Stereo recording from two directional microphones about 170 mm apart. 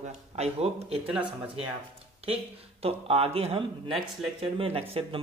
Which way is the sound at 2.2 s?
35° right (ahead or behind).